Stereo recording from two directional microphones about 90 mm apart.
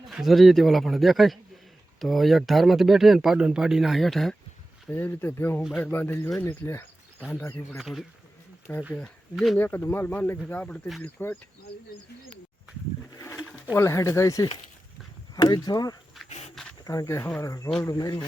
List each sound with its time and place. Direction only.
0.1 s speech: 5° right (ahead or behind)
4.9 s speech: 25° left (ahead or behind)
7.8 s speech: centre (ahead or behind)
8.7 s speech: 20° left (ahead or behind)
9.3 s speech: centre (ahead or behind)
9.6 s speech: 25° left (ahead or behind)
13.7 s speech: 30° left (ahead or behind)
15.4 s speech: 50° left (ahead or behind)
16.1 s dog: 5° left (ahead or behind)
16.8 s speech: 40° left (ahead or behind)